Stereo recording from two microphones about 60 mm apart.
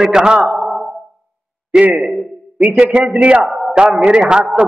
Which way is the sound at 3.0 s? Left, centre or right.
Right.